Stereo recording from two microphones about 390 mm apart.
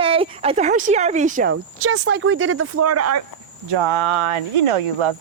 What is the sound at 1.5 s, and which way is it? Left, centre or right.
Speech, right.